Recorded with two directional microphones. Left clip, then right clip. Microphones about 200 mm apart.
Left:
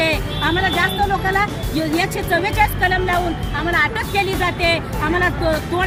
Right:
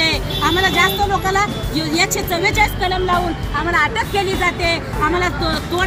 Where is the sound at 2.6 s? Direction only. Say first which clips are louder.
Even; 15° left (ahead or behind).